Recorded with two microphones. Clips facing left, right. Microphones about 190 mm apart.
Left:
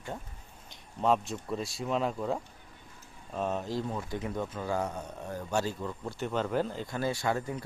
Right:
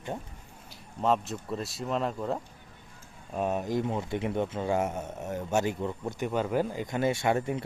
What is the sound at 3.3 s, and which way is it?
Speech, 15° right (ahead or behind).